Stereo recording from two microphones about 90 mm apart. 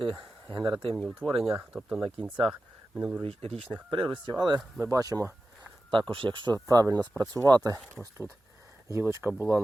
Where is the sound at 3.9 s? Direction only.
65° right (ahead or behind); by 4.6 s 50° right (ahead or behind).